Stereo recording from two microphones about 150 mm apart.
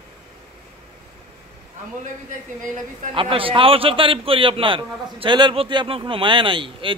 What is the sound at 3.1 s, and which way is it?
A man's voice, 35° right (ahead or behind).